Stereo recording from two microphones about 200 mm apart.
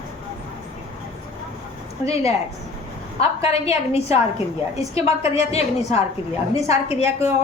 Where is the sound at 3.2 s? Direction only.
30° left (ahead or behind).